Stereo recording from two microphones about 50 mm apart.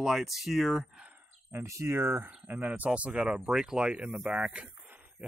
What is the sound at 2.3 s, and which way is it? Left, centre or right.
Speech, right.